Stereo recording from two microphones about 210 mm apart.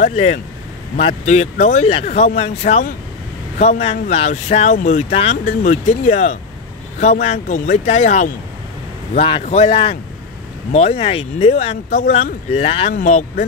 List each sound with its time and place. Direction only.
0.0 s speech: 30° left (ahead or behind)